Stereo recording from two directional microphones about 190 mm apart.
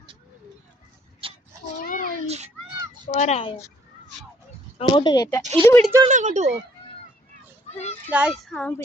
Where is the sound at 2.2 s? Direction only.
35° right (ahead or behind).